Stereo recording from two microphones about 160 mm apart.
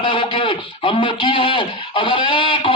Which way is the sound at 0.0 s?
30° left (ahead or behind).